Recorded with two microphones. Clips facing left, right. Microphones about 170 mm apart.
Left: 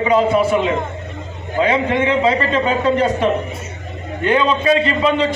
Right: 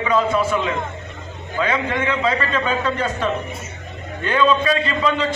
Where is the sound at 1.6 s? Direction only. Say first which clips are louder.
Left 5 dB; 25° left (ahead or behind).